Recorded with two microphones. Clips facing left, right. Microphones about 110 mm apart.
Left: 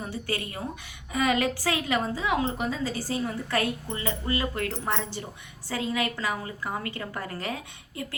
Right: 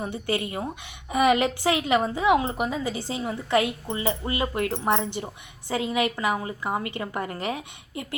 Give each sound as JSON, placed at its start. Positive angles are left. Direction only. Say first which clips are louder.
{"t": 0.0, "sound": "a woman's voice", "louder": "right 4 dB", "side_deg": -20}